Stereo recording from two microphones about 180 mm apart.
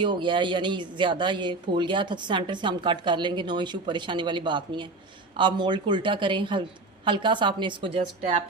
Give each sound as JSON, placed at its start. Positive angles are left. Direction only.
{"t": 0.0, "sound": "speech", "side_deg": -25}